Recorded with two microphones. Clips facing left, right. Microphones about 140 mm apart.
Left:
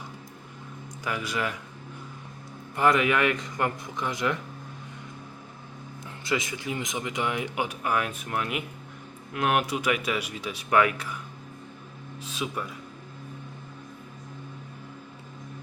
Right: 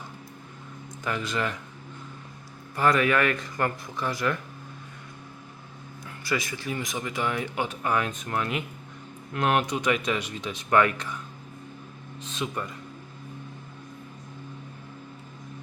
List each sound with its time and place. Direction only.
1.0 s speech: 10° left (ahead or behind)
2.7 s speech: 20° left (ahead or behind)
6.2 s speech: 20° left (ahead or behind)
12.2 s speech: 10° left (ahead or behind)